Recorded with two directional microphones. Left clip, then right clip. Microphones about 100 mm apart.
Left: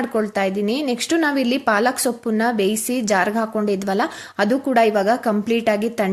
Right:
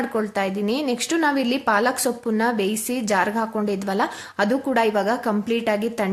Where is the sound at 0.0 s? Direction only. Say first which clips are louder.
Left 3 dB; 25° left (ahead or behind).